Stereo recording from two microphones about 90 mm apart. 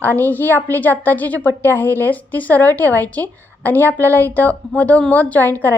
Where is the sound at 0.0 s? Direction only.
20° left (ahead or behind).